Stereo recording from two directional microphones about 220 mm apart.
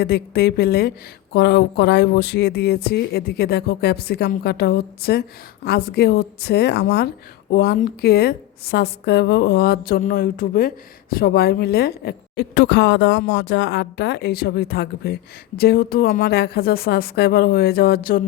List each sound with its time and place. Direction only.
0.0 s speech: 45° left (ahead or behind)